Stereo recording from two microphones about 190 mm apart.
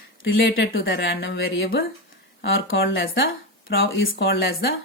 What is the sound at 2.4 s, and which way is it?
Speech, 85° left.